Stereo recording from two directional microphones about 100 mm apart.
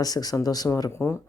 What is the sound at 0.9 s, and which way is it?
Speech, 25° left (ahead or behind).